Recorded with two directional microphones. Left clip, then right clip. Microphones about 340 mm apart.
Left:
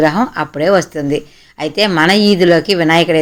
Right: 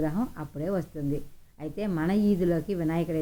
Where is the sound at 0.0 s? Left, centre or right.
Centre.